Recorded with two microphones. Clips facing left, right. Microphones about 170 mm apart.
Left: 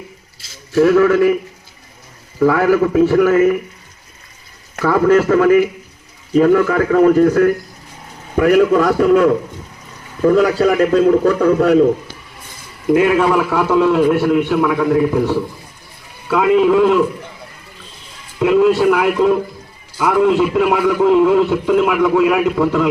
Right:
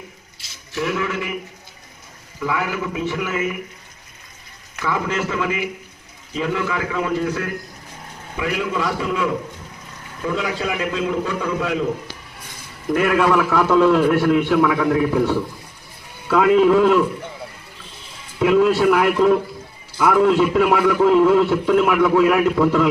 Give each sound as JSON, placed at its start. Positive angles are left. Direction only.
{"t": 0.7, "sound": "a man's voice", "side_deg": 45}
{"t": 2.4, "sound": "a man's voice", "side_deg": 45}
{"t": 4.8, "sound": "a man's voice", "side_deg": 45}
{"t": 12.9, "sound": "a man's voice", "side_deg": 10}
{"t": 18.3, "sound": "a man's voice", "side_deg": 0}